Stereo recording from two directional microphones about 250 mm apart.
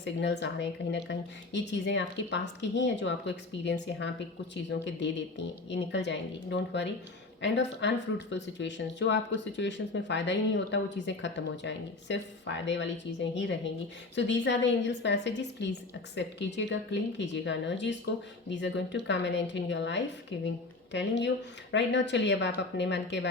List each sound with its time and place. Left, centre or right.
0.0 s speech: left